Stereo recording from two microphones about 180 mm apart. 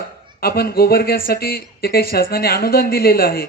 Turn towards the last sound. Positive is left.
turn(degrees=55)  # may be behind; listen again after turning